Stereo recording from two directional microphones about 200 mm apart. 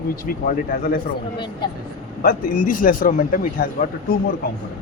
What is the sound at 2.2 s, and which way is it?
Speech, 45° left (ahead or behind).